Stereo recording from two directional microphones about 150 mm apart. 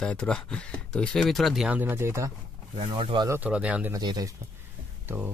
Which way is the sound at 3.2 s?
15° right (ahead or behind).